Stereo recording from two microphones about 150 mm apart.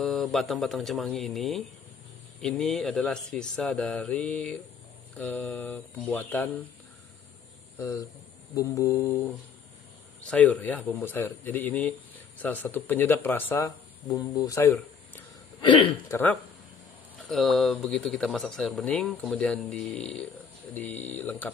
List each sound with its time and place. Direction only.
0.0 s speech: centre (ahead or behind)
7.8 s speech: 20° left (ahead or behind)
13.7 s speech: 25° left (ahead or behind)
15.6 s speech: 35° left (ahead or behind)
16.1 s speech: 10° left (ahead or behind)
17.3 s speech: centre (ahead or behind)